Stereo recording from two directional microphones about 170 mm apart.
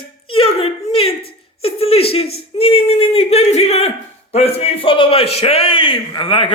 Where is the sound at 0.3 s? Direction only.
35° left (ahead or behind).